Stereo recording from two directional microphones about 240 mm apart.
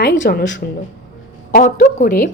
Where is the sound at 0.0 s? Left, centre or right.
Left.